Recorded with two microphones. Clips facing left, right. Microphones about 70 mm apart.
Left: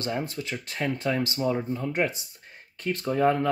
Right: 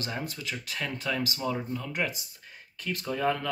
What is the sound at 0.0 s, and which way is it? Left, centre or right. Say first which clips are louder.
Speech: left 5 dB; left.